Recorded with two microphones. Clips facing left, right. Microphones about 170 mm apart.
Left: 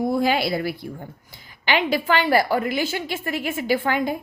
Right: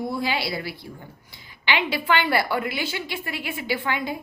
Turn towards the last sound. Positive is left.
turn(degrees=45)  # may be behind; listen again after turning